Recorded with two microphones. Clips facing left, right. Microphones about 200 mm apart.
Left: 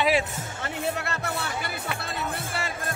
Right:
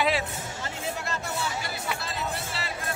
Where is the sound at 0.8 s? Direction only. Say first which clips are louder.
Left 3 dB; 60° left (ahead or behind).